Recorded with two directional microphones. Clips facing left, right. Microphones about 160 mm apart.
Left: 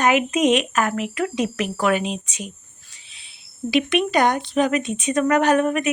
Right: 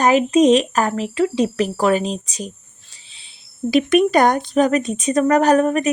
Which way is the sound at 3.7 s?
45° right (ahead or behind).